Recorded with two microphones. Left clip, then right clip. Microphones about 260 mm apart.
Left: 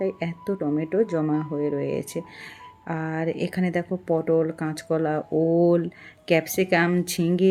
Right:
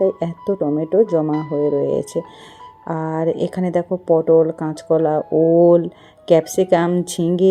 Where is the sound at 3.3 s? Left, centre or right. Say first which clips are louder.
Right 7 dB; right.